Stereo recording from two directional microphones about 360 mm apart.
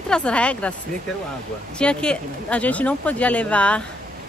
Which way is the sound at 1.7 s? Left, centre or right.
Centre.